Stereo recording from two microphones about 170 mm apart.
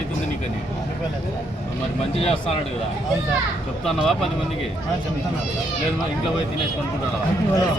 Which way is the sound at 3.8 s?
Centre (ahead or behind).